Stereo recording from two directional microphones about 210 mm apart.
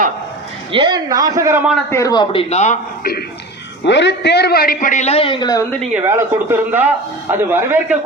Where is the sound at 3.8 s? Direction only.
55° left (ahead or behind); by 5.6 s 20° left (ahead or behind).